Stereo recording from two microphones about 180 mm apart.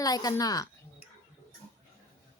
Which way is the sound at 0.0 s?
20° left (ahead or behind).